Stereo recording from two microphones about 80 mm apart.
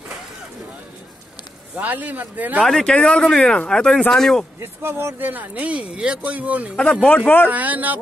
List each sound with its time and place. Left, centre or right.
1.8 s speech: right
2.6 s speech: centre
4.6 s speech: right
6.8 s speech: centre
7.4 s speech: centre